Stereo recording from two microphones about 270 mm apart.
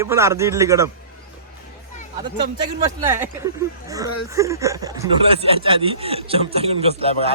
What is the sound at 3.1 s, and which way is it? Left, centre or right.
Speech, centre.